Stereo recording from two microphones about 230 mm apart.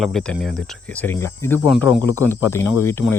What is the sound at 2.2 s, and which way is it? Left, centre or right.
Speech, centre.